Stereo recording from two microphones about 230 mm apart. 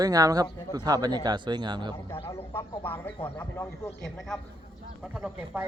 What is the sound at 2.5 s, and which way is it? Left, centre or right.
A man's voice, centre.